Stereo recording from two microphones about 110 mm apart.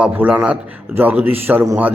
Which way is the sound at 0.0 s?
15° right (ahead or behind).